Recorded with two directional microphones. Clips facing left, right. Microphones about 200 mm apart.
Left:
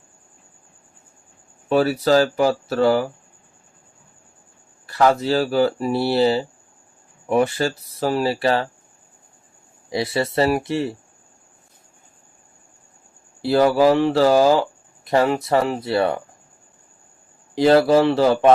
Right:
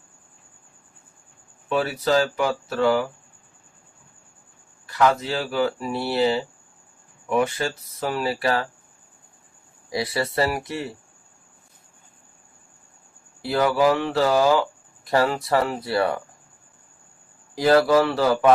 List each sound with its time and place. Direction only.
1.7 s speech: 35° left (ahead or behind)
4.9 s speech: 35° left (ahead or behind)
9.9 s speech: 25° left (ahead or behind)
13.4 s speech: 30° left (ahead or behind)
15.0 s speech: 20° left (ahead or behind)
17.5 s speech: 25° left (ahead or behind)